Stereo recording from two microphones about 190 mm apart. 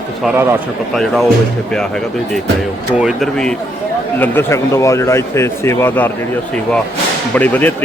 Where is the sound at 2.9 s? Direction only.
Centre (ahead or behind).